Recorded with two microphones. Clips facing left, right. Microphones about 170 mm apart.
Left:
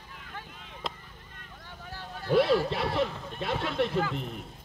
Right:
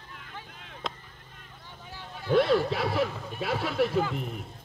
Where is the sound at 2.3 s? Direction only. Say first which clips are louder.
Right 1 dB; centre (ahead or behind).